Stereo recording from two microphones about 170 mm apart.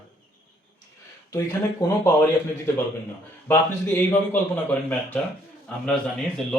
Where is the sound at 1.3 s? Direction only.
20° left (ahead or behind).